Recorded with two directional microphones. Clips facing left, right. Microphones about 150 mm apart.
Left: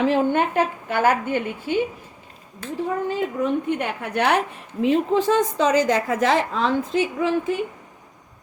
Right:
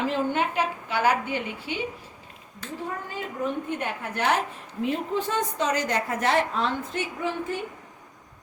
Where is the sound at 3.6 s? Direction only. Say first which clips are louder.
Left 5 dB; 70° left (ahead or behind); by 7.5 s 90° left.